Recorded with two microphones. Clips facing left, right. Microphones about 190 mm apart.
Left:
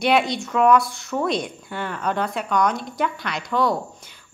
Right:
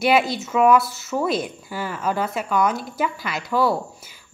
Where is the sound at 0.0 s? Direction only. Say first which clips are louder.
Right 1 dB; 5° right (ahead or behind).